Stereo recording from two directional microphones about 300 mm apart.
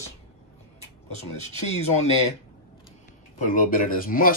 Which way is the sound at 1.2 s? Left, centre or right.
Left.